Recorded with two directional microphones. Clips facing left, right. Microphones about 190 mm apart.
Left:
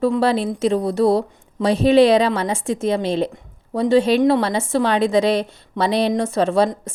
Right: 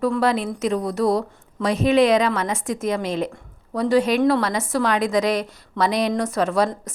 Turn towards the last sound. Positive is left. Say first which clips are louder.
# left 3 dB
turn(degrees=30)  # may be behind; listen again after turning